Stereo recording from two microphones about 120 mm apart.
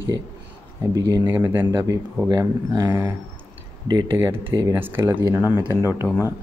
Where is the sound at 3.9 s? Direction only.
35° right (ahead or behind).